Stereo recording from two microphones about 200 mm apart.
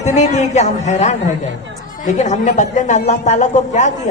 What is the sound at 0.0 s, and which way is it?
A man's voice, 35° left (ahead or behind).